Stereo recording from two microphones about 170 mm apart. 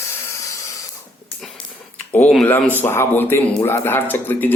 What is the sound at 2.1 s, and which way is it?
A man's voice, 5° left (ahead or behind).